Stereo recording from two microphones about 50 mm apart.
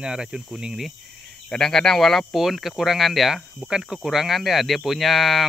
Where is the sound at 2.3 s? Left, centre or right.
Centre.